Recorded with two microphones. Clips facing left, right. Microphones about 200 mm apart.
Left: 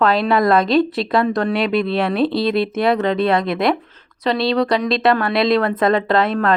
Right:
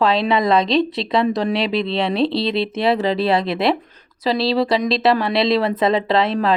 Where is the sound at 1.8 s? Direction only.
25° right (ahead or behind).